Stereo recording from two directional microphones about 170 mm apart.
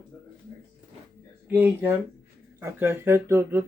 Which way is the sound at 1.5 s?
10° right (ahead or behind).